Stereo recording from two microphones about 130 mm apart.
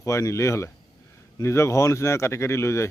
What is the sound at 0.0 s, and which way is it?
Speech, 25° left (ahead or behind).